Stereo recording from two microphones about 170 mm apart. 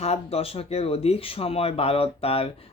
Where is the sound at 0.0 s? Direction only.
35° left (ahead or behind).